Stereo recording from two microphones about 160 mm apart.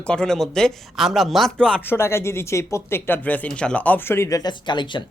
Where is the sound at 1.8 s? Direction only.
15° left (ahead or behind).